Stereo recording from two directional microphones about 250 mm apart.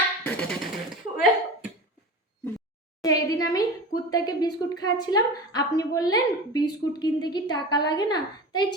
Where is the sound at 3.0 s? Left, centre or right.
Centre.